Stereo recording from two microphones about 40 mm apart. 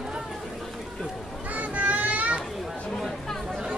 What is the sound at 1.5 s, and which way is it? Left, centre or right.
Children playing, right.